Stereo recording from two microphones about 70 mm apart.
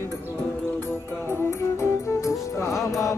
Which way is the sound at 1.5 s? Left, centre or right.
Left.